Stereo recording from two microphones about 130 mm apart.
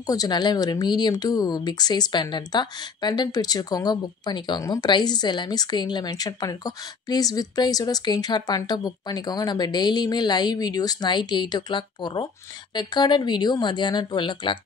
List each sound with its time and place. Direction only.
0.0 s speech: 30° left (ahead or behind)